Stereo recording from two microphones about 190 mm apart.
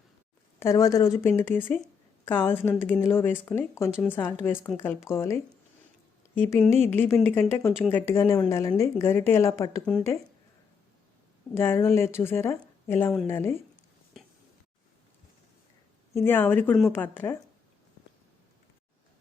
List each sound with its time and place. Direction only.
0.6 s a woman's voice: 15° left (ahead or behind)
11.5 s a woman's voice: 10° left (ahead or behind)
16.1 s a woman's voice: 10° left (ahead or behind)